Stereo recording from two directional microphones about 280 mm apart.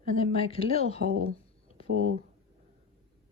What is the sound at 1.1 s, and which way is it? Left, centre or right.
Speech, right.